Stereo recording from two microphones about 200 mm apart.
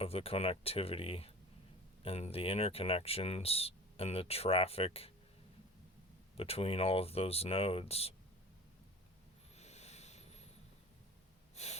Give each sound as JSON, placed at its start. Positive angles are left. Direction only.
{"t": 0.0, "sound": "speech", "side_deg": 30}
{"t": 6.3, "sound": "speech", "side_deg": 30}
{"t": 9.6, "sound": "a sound", "side_deg": 35}
{"t": 11.5, "sound": "snort", "side_deg": 35}